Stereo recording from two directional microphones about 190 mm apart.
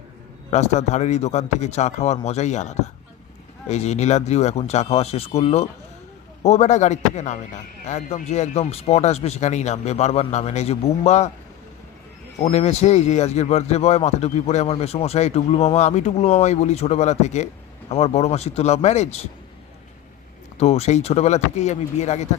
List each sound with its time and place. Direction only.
0.5 s a man's voice: 35° left (ahead or behind)
12.4 s a man's voice: 35° left (ahead or behind)
20.6 s a man's voice: 35° left (ahead or behind)